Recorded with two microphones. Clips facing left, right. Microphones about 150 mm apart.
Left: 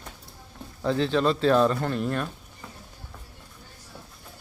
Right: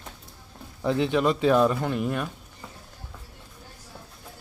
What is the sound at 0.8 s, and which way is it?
Speech, 15° right (ahead or behind).